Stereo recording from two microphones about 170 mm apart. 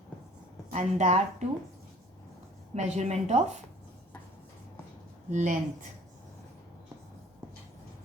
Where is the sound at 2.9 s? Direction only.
40° right (ahead or behind).